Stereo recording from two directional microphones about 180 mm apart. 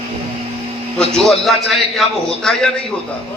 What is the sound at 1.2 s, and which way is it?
A man's voice, centre (ahead or behind).